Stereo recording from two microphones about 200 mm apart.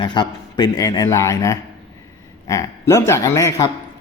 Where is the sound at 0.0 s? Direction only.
25° left (ahead or behind).